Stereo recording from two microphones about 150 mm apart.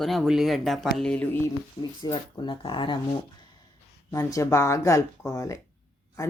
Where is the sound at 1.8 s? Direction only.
30° left (ahead or behind).